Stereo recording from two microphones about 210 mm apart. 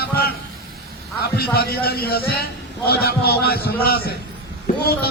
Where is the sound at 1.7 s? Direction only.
45° left (ahead or behind).